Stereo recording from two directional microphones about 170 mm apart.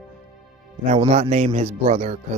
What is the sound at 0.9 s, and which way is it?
Speech, 40° right (ahead or behind).